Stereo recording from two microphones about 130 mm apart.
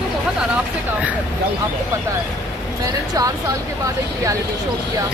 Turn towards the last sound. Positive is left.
turn(degrees=-25)  # may be behind; listen again after turning